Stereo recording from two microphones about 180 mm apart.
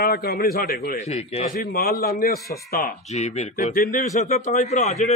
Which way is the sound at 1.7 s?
55° left (ahead or behind).